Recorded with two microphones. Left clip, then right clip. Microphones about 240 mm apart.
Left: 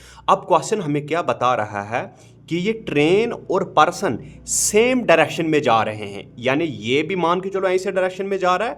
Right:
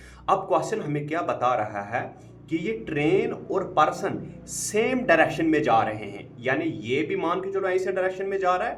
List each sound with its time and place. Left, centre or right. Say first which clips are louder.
0.3 s a man's voice: left 6 dB; left